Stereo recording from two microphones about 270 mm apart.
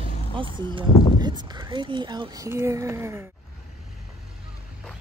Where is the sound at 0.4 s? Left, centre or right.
Centre.